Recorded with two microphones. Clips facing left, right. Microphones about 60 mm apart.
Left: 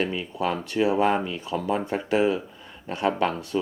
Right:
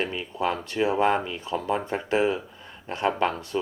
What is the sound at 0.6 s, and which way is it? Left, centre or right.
Speech, right.